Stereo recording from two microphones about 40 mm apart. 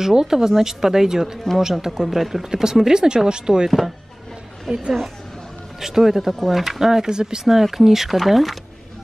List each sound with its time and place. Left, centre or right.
0.0 s speech: centre
2.5 s speech: centre
4.7 s speech: centre
7.4 s speech: centre